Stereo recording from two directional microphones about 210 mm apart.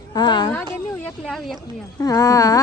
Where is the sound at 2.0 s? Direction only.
15° left (ahead or behind).